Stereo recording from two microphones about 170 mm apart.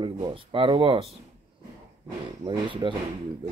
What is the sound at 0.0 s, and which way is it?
Speech, 30° right (ahead or behind).